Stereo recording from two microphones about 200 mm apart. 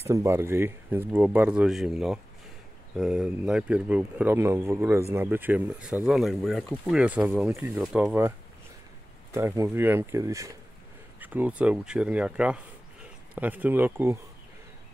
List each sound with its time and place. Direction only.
0.0 s speech: 15° right (ahead or behind)
9.3 s speech: 10° right (ahead or behind)